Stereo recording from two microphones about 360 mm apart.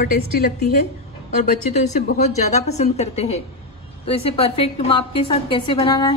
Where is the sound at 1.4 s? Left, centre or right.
Centre.